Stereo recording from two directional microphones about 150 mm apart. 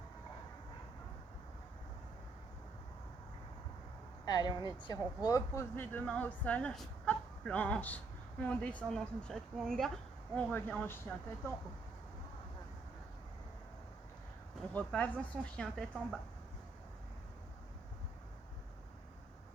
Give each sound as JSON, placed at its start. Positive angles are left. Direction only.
{"t": 4.3, "sound": "speech", "side_deg": 25}
{"t": 14.7, "sound": "speech", "side_deg": 10}